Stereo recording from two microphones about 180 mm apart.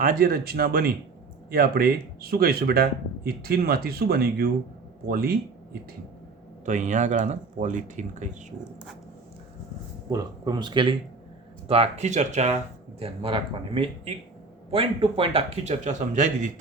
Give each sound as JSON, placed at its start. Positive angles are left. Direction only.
{"t": 0.0, "sound": "speech", "side_deg": -55}
{"t": 6.7, "sound": "speech", "side_deg": -45}
{"t": 10.1, "sound": "speech", "side_deg": -20}